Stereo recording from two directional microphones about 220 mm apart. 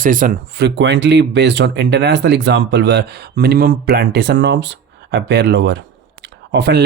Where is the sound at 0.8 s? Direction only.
50° right (ahead or behind).